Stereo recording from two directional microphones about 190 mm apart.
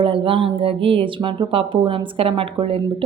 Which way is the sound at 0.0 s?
30° right (ahead or behind).